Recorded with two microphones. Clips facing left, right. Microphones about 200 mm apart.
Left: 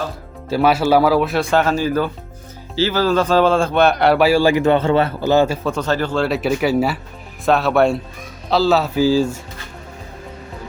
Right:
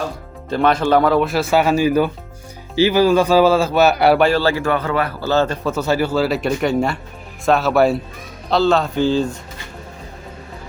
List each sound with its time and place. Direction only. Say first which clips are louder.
0.5 s a man's voice: left 1 dB; 5° left (ahead or behind)
4.3 s a man's voice: left 3 dB; 15° left (ahead or behind)
5.6 s a man's voice: right 1 dB; 5° right (ahead or behind)